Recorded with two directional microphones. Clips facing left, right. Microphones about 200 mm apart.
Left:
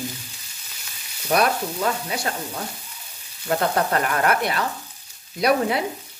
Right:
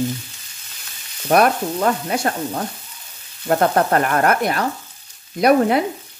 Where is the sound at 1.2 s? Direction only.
50° right (ahead or behind).